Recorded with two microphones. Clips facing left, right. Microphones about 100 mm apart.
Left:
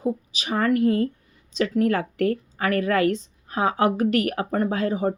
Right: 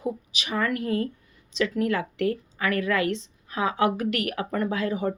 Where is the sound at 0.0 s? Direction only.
35° left (ahead or behind).